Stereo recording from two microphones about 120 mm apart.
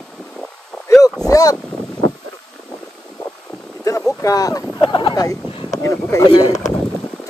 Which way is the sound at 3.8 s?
30° left (ahead or behind).